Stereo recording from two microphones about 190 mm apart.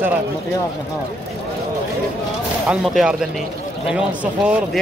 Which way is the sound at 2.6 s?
5° right (ahead or behind).